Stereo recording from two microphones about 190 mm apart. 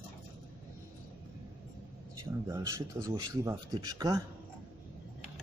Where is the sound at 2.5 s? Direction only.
15° right (ahead or behind).